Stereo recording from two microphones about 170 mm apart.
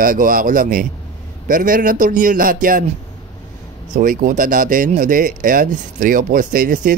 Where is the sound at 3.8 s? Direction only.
50° right (ahead or behind).